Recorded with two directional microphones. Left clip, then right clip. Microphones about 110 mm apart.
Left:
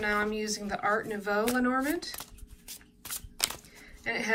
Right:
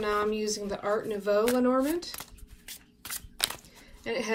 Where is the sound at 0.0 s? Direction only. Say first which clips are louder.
Right 1 dB; 20° right (ahead or behind).